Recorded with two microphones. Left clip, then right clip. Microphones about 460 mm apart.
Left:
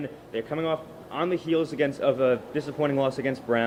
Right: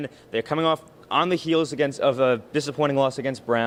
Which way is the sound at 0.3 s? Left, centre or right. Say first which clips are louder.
Right 5 dB; right.